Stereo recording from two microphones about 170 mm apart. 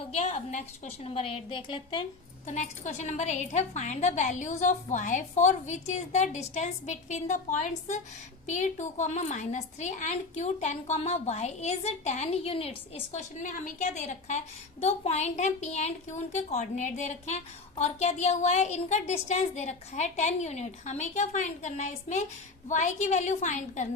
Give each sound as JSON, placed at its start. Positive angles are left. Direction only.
{"t": 0.0, "sound": "a woman's voice", "side_deg": 40}
{"t": 2.5, "sound": "a woman's voice", "side_deg": 45}